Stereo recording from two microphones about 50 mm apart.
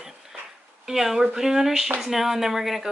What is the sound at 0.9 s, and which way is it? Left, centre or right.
Speech, centre.